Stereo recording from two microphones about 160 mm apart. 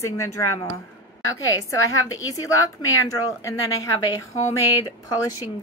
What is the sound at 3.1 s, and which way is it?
Speech, 20° left (ahead or behind).